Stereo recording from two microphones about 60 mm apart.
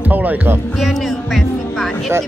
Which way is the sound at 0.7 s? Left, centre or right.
Centre.